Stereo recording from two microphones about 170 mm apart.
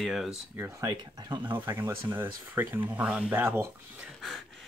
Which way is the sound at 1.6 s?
10° right (ahead or behind).